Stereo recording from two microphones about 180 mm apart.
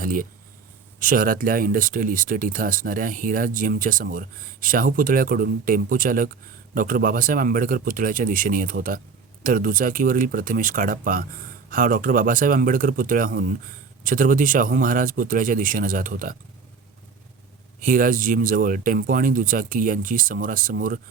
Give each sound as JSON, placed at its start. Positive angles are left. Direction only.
{"t": 0.0, "sound": "speech", "side_deg": -50}
{"t": 17.7, "sound": "speech", "side_deg": -50}